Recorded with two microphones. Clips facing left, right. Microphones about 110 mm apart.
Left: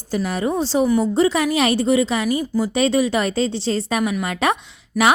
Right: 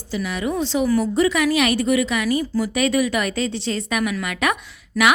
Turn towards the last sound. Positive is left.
turn(degrees=30)  # may be behind; listen again after turning